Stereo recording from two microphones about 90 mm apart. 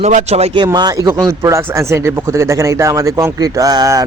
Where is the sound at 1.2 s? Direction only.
35° right (ahead or behind).